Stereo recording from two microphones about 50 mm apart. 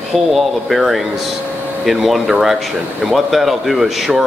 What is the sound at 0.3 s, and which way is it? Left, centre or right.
Speech, centre.